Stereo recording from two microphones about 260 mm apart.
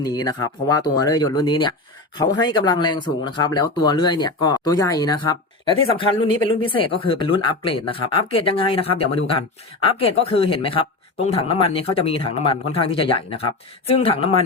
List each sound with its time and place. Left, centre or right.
0.0 s speech: centre